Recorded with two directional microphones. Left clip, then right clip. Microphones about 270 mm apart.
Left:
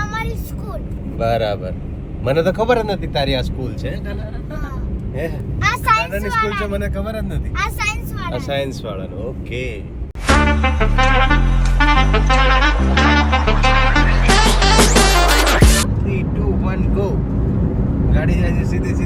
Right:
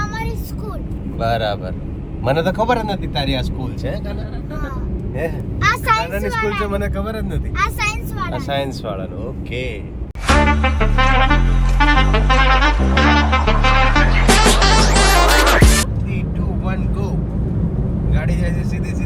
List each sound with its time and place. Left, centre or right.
0.0 s a sound: centre
1.2 s speech: centre
5.2 s speech: centre
10.4 s music: centre